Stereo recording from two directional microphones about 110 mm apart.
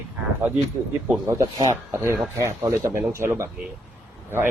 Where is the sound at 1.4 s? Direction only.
30° right (ahead or behind).